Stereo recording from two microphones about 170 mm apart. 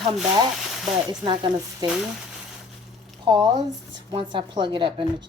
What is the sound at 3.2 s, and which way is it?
A woman's voice, 25° right (ahead or behind).